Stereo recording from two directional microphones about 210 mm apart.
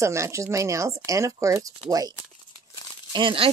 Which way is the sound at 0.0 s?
15° right (ahead or behind).